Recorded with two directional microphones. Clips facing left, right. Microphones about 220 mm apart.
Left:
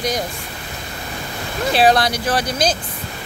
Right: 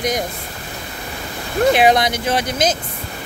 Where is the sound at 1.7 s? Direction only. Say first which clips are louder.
Even; 20° right (ahead or behind).